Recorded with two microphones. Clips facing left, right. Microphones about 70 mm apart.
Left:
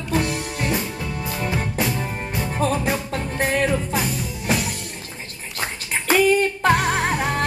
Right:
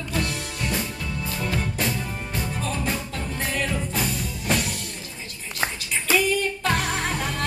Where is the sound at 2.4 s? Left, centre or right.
Left.